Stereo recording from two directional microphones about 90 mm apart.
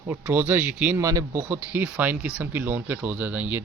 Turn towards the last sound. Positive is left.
turn(degrees=-20)  # may be behind; listen again after turning